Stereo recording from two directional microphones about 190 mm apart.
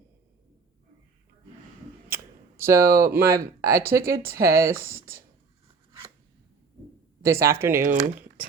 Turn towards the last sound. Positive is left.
turn(degrees=-10)  # may be behind; listen again after turning